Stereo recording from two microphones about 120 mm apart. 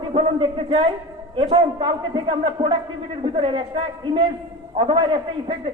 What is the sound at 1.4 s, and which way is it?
Speech, 55° right (ahead or behind).